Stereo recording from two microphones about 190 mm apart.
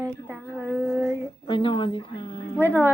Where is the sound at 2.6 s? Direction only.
10° right (ahead or behind).